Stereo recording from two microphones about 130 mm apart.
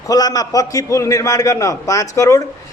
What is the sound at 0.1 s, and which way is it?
A man's voice, 30° left (ahead or behind).